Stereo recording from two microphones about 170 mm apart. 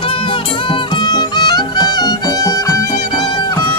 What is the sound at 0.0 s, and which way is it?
Music, 30° left (ahead or behind).